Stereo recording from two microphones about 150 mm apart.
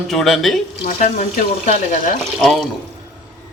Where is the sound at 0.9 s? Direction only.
55° left (ahead or behind).